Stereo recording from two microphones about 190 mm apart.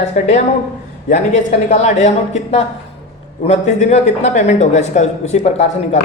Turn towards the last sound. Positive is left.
turn(degrees=35)  # may be behind; listen again after turning